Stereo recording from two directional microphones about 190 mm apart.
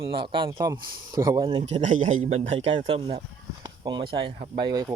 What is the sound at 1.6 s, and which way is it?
Speech, 40° right (ahead or behind).